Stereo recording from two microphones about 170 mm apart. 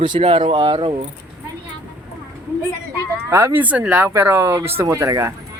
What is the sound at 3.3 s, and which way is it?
Speech, 15° right (ahead or behind).